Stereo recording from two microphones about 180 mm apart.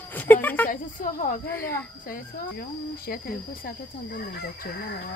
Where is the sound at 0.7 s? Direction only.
50° left (ahead or behind).